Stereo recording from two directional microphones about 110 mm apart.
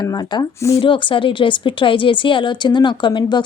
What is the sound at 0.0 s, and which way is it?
Speech, 35° left (ahead or behind).